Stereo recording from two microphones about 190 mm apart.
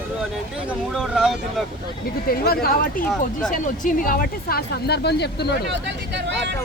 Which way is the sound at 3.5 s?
45° left (ahead or behind).